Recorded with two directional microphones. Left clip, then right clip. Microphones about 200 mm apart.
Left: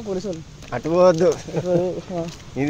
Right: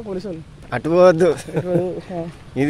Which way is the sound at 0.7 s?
45° right (ahead or behind).